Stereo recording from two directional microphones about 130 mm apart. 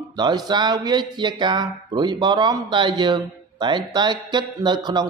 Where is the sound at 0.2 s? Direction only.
35° right (ahead or behind).